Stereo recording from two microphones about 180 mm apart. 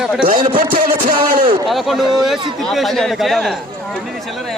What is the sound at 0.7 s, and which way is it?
Speech, 50° right (ahead or behind).